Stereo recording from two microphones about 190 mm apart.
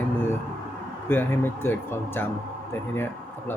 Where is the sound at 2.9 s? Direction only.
10° left (ahead or behind).